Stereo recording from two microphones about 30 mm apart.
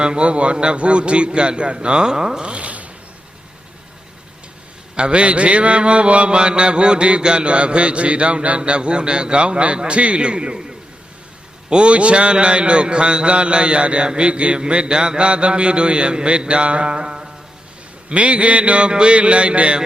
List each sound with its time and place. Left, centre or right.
0.0 s mantra: right
0.5 s mantra: right
2.5 s zipper: right
4.9 s mantra: right
11.7 s mantra: right
15.3 s mantra: right
18.1 s mantra: right
18.9 s mantra: right